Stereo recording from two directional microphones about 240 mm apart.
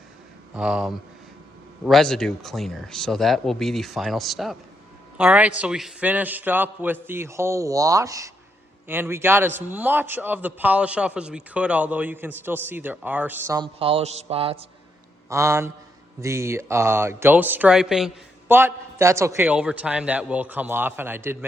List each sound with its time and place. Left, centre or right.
0.5 s speech: centre
13.7 s a sound: right
15.3 s speech: centre